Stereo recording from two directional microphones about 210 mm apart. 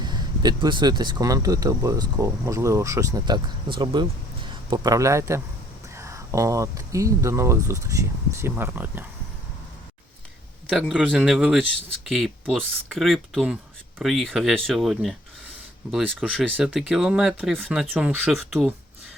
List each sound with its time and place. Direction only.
0.0 s speech: 20° right (ahead or behind)
10.7 s speech: centre (ahead or behind)